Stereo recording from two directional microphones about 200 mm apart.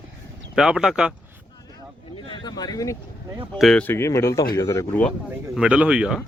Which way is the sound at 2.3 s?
20° left (ahead or behind).